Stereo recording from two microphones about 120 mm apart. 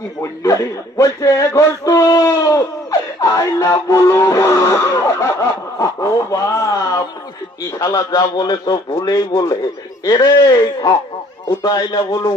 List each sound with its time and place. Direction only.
0.2 s a man's voice: 25° left (ahead or behind)